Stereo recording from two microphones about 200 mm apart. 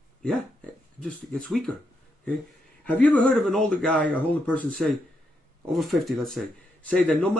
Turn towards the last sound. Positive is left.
turn(degrees=5)  # may be behind; listen again after turning